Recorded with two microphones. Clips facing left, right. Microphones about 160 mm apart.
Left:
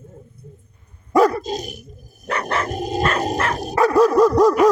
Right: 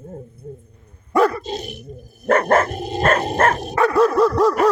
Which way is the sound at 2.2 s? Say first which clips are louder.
Right 8 dB; 45° right (ahead or behind).